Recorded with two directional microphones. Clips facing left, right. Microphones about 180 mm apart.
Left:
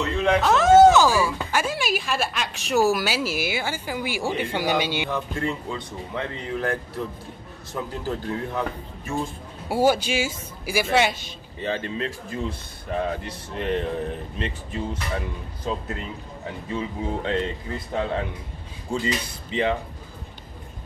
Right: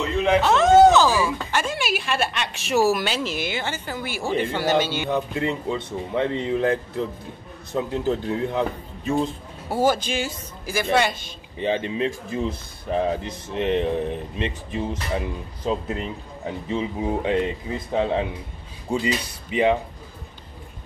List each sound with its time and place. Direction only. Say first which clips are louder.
0.2 s speech: right 1 dB; 5° right (ahead or behind); by 5.1 s 15° left (ahead or behind)
5.1 s speech: right 3 dB; 20° right (ahead or behind)
9.7 s speech: left 1 dB; 10° left (ahead or behind)
11.5 s speech: right 4 dB; 15° right (ahead or behind)